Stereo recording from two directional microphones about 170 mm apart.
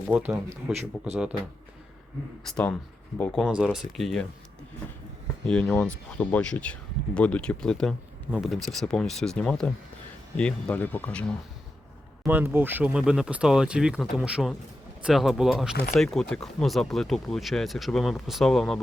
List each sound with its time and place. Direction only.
0.1 s speech: 10° right (ahead or behind)
0.5 s a man's voice: 40° right (ahead or behind)
1.1 s speech: 5° right (ahead or behind)
2.5 s speech: 5° left (ahead or behind)
5.5 s speech: 5° left (ahead or behind)
12.2 s speech: 10° right (ahead or behind)